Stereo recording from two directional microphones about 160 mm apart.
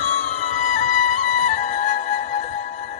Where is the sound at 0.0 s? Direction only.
50° left (ahead or behind).